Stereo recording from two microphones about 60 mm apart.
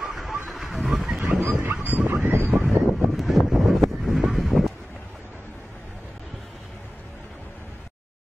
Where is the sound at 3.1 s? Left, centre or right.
Centre.